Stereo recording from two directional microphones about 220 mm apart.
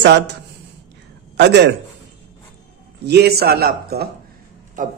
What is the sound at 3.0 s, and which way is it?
A man's voice, 45° right (ahead or behind).